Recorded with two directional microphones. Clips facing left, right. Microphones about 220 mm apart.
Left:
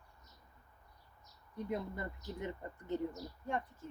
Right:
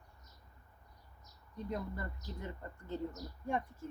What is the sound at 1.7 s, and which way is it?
Speech, 20° left (ahead or behind).